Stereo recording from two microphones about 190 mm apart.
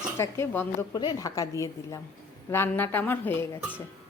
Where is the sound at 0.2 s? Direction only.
15° left (ahead or behind).